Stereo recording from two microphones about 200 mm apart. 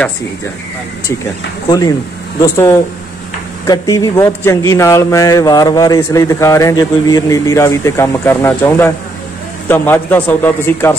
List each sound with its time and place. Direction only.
1.0 s a man's voice: 15° left (ahead or behind)